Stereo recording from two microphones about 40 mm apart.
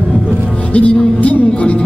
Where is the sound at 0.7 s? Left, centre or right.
Left.